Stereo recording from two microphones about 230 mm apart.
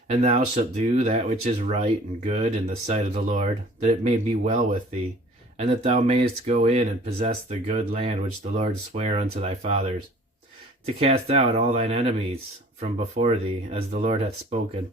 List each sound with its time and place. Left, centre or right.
0.1 s speech: right
10.8 s speech: right